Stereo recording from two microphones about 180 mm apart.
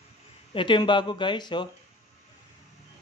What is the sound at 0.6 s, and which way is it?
Speech, 25° left (ahead or behind).